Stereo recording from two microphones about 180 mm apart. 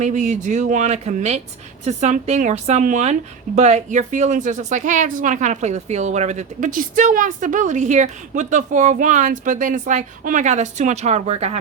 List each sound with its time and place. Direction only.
0.0 s a woman's voice: 45° right (ahead or behind)